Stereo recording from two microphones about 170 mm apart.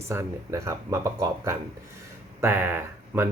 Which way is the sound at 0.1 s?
15° right (ahead or behind).